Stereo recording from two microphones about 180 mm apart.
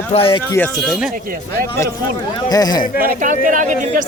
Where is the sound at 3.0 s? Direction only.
45° right (ahead or behind).